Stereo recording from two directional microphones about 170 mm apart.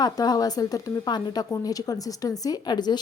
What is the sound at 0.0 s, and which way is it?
A woman's voice, 25° left (ahead or behind).